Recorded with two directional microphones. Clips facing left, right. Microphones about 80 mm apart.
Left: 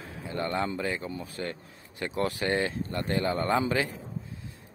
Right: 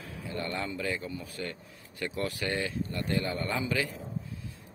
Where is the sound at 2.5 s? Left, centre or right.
Left.